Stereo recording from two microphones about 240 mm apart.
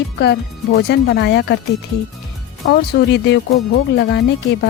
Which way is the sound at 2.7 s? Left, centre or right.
Left.